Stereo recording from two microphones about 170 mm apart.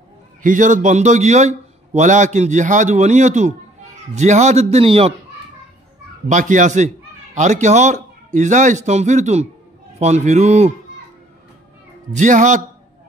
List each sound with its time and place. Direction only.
0.4 s a man's voice: 50° right (ahead or behind)
6.2 s a man's voice: 45° right (ahead or behind)
12.1 s a man's voice: 45° right (ahead or behind)